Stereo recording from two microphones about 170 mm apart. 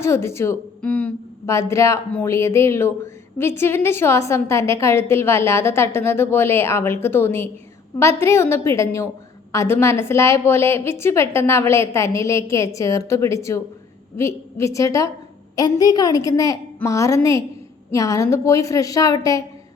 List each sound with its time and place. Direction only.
0.0 s a woman's voice: 15° left (ahead or behind)